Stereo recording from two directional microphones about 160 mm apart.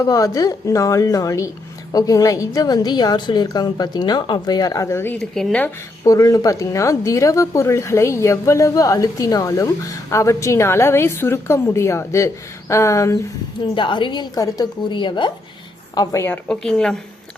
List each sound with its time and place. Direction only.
0.0 s speech: 20° left (ahead or behind)
6.1 s speech: 20° left (ahead or behind)
13.7 s speech: 30° left (ahead or behind)
16.0 s a woman's voice: 15° left (ahead or behind)